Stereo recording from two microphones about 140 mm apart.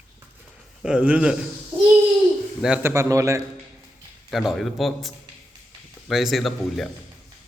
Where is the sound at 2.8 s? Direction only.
20° right (ahead or behind).